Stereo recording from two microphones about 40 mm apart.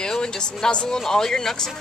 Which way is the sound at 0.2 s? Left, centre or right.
Left.